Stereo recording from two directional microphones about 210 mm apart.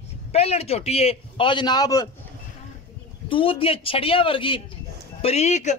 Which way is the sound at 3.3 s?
25° left (ahead or behind).